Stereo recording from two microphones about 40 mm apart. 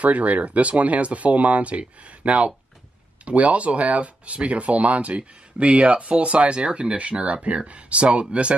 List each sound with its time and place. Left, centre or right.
0.0 s speech: right